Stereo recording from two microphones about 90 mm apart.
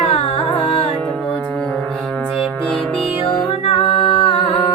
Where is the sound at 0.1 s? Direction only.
90° left.